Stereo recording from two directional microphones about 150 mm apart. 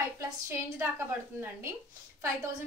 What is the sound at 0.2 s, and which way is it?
A woman's voice, 15° right (ahead or behind).